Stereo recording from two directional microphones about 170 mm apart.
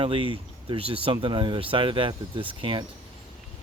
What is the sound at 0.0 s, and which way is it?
Speech, 30° right (ahead or behind).